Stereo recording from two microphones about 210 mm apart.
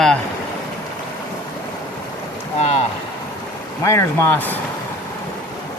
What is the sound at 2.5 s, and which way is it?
Speech, 30° left (ahead or behind).